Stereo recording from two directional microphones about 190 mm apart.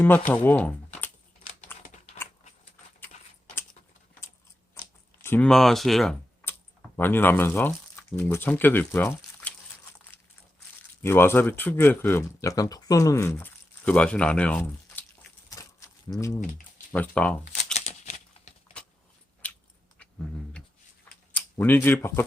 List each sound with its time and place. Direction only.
0.3 s speech: 10° left (ahead or behind)
1.7 s typing: 10° left (ahead or behind)
5.2 s speech: 10° left (ahead or behind)
6.4 s computer keyboard: 10° left (ahead or behind)
8.1 s speech: 10° left (ahead or behind)
11.0 s speech: 15° left (ahead or behind)
15.4 s a sound: 15° left (ahead or behind)
16.1 s speech: 15° left (ahead or behind)
17.7 s a sound: 35° left (ahead or behind)
19.4 s biting: 5° left (ahead or behind)
20.0 s a sound: 5° left (ahead or behind)
21.3 s speech: 10° left (ahead or behind)